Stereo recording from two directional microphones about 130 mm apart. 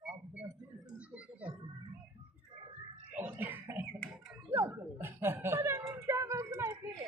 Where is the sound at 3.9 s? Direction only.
5° left (ahead or behind).